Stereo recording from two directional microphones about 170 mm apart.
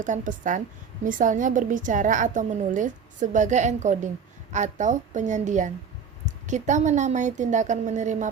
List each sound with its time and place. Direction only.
0.0 s a woman's voice: 50° right (ahead or behind)